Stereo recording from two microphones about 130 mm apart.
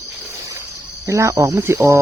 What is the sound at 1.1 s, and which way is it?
Speech, 20° right (ahead or behind).